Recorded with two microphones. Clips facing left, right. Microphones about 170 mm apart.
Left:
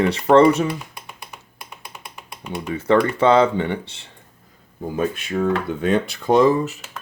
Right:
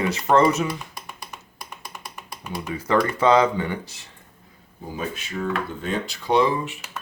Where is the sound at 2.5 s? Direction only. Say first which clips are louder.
Left 4 dB; 25° left (ahead or behind).